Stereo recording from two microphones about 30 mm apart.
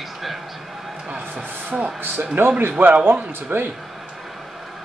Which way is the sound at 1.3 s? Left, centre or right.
Right.